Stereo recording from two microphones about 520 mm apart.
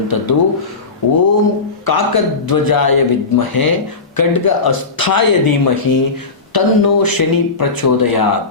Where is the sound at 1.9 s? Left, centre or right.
Left.